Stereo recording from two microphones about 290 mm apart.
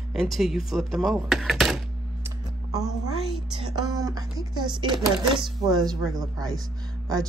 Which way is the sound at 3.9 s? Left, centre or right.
Centre.